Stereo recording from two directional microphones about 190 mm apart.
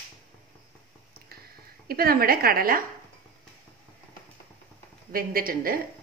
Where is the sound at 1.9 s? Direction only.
55° right (ahead or behind).